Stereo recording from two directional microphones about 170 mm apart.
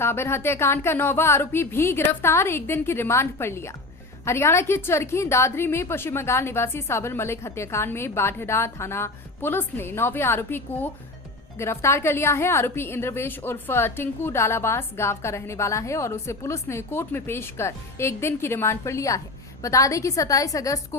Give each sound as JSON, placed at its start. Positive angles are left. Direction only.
{"t": 0.0, "sound": "a woman's voice", "side_deg": 15}